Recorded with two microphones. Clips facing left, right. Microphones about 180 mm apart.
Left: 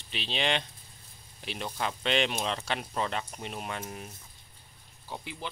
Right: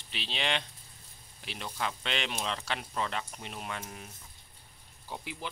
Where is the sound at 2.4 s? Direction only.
30° left (ahead or behind).